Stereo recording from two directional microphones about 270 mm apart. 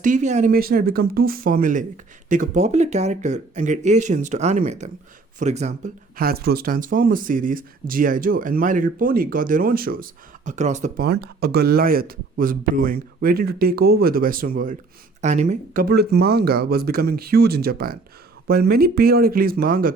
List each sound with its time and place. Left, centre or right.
0.0 s speech: right